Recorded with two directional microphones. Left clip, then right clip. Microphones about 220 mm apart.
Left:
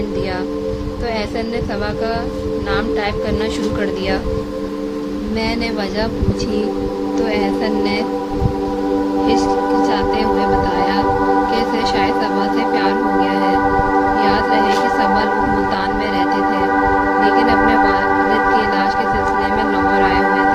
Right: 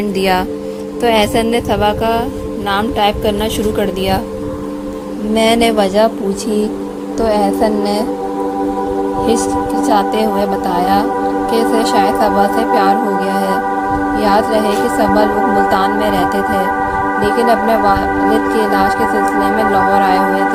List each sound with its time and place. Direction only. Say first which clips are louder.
1.0 s speech: right 10 dB; 35° right (ahead or behind)
5.3 s speech: right 10 dB; 35° right (ahead or behind)
7.2 s music: right 6 dB; 25° right (ahead or behind)
11.5 s music: right 4 dB; 25° right (ahead or behind)
14.2 s speech: right 2 dB; 25° right (ahead or behind)
15.7 s music: right 5 dB; 25° right (ahead or behind)
17.2 s music: right 3 dB; 25° right (ahead or behind)